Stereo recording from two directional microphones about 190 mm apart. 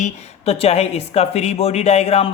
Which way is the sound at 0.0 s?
35° left (ahead or behind).